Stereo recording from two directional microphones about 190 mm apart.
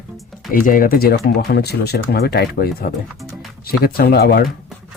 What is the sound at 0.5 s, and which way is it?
Speech, 50° left (ahead or behind).